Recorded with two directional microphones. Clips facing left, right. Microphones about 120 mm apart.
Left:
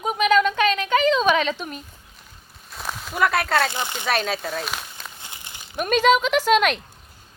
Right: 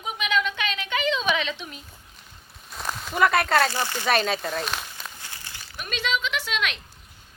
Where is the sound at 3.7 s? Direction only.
20° left (ahead or behind).